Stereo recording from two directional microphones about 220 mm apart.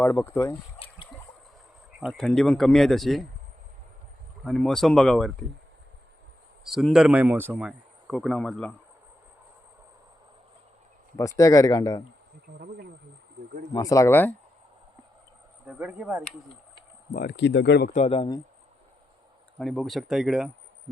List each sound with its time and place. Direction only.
0.0 s speech: 10° left (ahead or behind)
2.0 s a man's voice: centre (ahead or behind)
4.4 s a man's voice: 5° left (ahead or behind)
6.7 s a man's voice: centre (ahead or behind)
11.2 s speech: 15° left (ahead or behind)
12.5 s speech: 45° right (ahead or behind)
13.7 s speech: 15° left (ahead or behind)
15.6 s speech: 5° right (ahead or behind)
17.2 s speech: 45° left (ahead or behind)
17.9 s a man's voice: 25° left (ahead or behind)
19.5 s a man's voice: centre (ahead or behind)